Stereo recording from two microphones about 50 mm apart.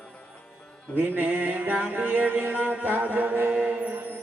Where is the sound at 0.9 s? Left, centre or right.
Right.